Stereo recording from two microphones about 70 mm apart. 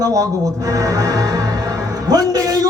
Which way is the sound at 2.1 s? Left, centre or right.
Right.